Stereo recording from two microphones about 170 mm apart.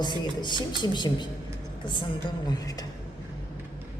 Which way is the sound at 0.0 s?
25° left (ahead or behind).